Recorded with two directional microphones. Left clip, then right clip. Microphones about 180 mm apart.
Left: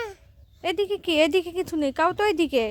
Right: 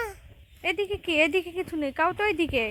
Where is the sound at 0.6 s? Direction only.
45° left (ahead or behind).